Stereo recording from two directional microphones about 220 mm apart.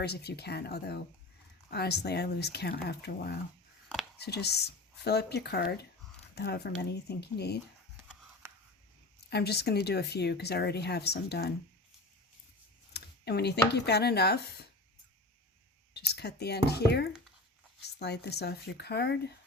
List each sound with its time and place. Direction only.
0.0 s speech: 50° left (ahead or behind)
7.9 s a sound: 10° right (ahead or behind)
9.3 s speech: 45° left (ahead or behind)
12.9 s speech: 50° left (ahead or behind)
16.0 s speech: 50° left (ahead or behind)